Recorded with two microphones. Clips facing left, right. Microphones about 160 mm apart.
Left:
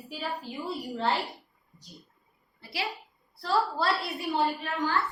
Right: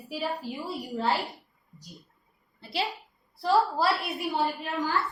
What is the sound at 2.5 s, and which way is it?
Speech, 25° right (ahead or behind).